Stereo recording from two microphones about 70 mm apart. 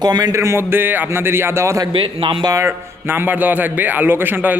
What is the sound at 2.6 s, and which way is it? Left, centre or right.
Speech, right.